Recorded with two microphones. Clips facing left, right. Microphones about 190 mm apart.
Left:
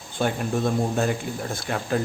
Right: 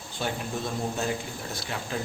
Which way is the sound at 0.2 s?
55° left (ahead or behind).